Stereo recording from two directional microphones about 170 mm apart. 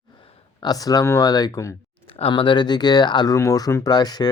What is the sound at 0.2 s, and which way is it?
Speech, 30° left (ahead or behind).